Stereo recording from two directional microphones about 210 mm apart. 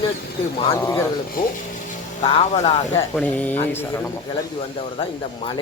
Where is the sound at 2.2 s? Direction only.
25° left (ahead or behind).